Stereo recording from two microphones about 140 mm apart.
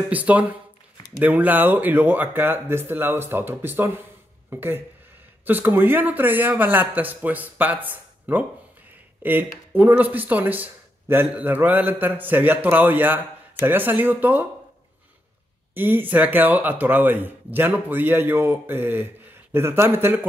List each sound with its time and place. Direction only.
0.1 s speech: 10° right (ahead or behind)
15.7 s speech: 15° right (ahead or behind)